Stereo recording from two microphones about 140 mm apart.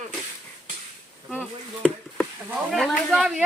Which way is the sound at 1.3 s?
10° right (ahead or behind).